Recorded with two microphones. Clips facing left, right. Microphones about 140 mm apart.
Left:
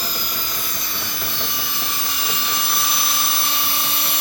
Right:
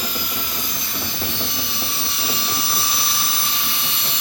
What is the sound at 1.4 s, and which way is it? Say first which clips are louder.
Vehicle: even; 50° left (ahead or behind).